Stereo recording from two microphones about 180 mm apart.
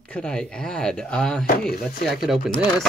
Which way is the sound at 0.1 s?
5° left (ahead or behind).